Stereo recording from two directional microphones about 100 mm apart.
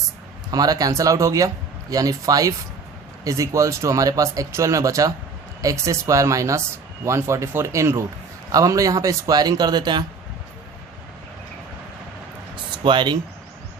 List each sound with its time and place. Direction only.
0.5 s speech: 40° right (ahead or behind)
12.7 s speech: 50° right (ahead or behind)